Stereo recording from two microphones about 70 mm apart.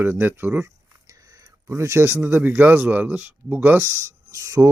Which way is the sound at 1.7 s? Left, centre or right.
Right.